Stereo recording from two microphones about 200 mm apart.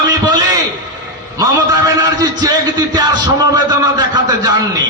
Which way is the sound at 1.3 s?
20° right (ahead or behind).